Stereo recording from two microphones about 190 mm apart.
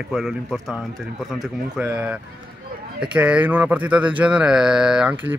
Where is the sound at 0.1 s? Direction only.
5° right (ahead or behind).